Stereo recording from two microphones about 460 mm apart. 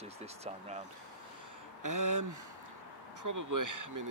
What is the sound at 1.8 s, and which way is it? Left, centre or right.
Speech, right.